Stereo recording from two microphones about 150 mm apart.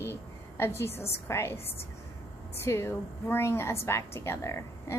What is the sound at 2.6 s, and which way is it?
A woman's voice, 15° left (ahead or behind).